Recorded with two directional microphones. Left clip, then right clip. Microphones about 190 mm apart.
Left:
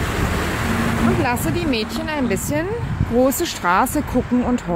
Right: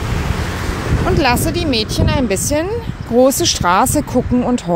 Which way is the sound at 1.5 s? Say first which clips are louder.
Right 4 dB; 25° right (ahead or behind).